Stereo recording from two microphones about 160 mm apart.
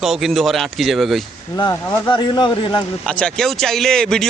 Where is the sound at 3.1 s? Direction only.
5° left (ahead or behind).